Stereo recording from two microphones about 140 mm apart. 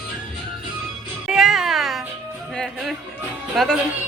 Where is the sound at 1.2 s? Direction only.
Centre (ahead or behind).